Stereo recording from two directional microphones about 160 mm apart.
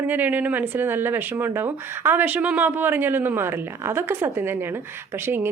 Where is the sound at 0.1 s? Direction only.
10° right (ahead or behind).